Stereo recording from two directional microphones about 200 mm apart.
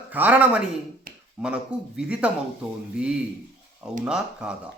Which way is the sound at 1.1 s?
45° right (ahead or behind).